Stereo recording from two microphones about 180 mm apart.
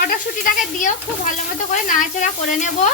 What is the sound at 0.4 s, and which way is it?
A woman's voice, 45° left (ahead or behind).